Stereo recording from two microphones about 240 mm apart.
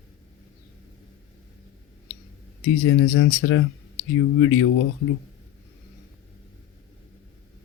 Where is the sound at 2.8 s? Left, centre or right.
Left.